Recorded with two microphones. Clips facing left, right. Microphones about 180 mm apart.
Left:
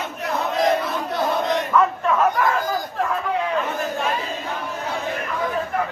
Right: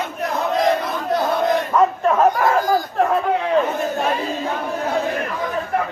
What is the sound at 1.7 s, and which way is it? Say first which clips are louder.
Chatter: even; 40° right (ahead or behind).